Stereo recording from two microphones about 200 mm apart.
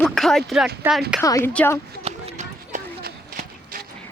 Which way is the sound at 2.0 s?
35° right (ahead or behind).